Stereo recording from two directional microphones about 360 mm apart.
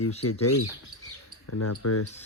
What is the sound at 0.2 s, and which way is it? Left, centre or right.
Speech, left.